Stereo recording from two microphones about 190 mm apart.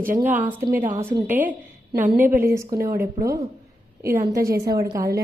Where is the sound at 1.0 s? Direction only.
15° right (ahead or behind).